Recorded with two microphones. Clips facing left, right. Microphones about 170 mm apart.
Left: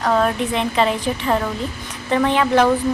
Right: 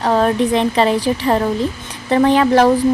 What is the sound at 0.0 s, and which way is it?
Speech, 30° right (ahead or behind).